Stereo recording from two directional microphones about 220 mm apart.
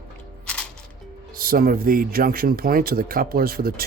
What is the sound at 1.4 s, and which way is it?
Speech, 40° right (ahead or behind).